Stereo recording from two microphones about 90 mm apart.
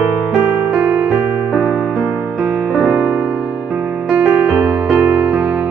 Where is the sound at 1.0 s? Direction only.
10° right (ahead or behind).